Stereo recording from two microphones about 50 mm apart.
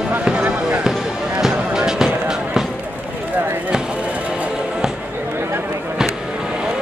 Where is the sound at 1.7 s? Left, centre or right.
Centre.